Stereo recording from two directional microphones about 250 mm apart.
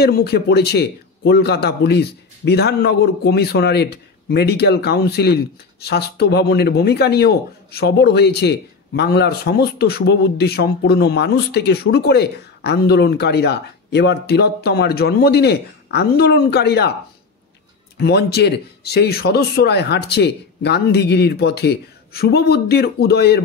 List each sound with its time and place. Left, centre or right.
0.0 s a man's voice: left
17.9 s a man's voice: left